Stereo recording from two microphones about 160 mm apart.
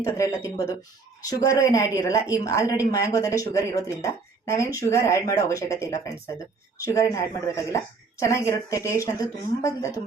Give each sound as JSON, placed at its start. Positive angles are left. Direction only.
{"t": 0.0, "sound": "speech", "side_deg": 20}